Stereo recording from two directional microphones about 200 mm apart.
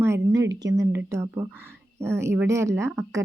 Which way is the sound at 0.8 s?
15° right (ahead or behind).